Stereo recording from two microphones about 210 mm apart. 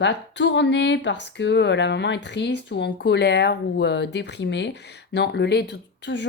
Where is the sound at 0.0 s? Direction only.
55° left (ahead or behind).